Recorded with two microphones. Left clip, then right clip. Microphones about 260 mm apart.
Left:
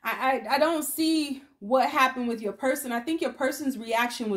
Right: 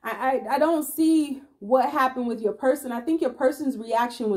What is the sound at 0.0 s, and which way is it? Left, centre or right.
A woman's voice, centre.